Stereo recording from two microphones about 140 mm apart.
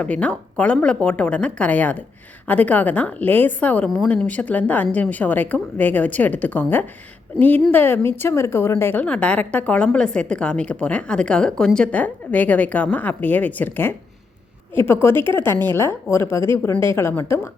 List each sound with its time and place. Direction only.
0.0 s a woman's voice: 10° left (ahead or behind)
3.8 s a woman's voice: centre (ahead or behind); by 17.5 s 15° left (ahead or behind)